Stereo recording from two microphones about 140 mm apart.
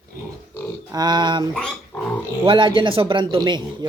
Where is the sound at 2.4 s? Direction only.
35° right (ahead or behind).